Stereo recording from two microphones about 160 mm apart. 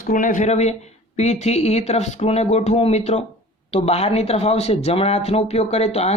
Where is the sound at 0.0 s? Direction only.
55° left (ahead or behind).